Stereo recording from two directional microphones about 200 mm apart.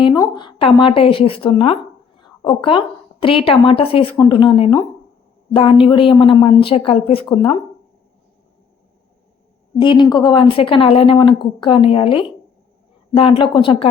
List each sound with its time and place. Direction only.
0.0 s a woman's voice: 20° left (ahead or behind)
9.8 s a woman's voice: 25° left (ahead or behind)